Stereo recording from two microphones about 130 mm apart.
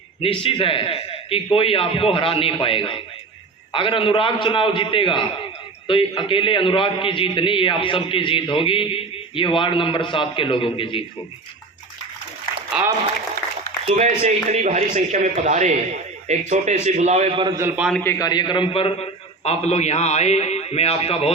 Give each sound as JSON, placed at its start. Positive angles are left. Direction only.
{"t": 0.2, "sound": "a man's voice", "side_deg": 45}
{"t": 12.7, "sound": "speech", "side_deg": -5}
{"t": 13.8, "sound": "a man's voice", "side_deg": -55}
{"t": 17.7, "sound": "a man's voice", "side_deg": -5}
{"t": 18.0, "sound": "a man's voice", "side_deg": 20}
{"t": 18.3, "sound": "a man's voice", "side_deg": 35}